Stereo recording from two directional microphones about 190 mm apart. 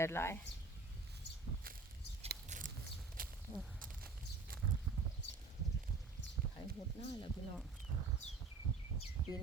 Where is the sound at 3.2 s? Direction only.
50° right (ahead or behind).